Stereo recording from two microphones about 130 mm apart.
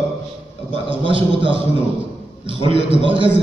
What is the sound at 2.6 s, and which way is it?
Speech, 45° right (ahead or behind).